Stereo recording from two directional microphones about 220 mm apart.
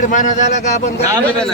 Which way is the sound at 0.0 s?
35° left (ahead or behind).